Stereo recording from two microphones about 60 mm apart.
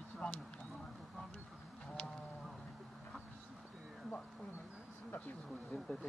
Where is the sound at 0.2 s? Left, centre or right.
Left.